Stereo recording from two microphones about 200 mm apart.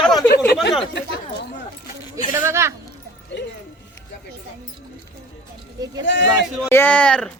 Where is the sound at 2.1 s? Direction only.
15° right (ahead or behind).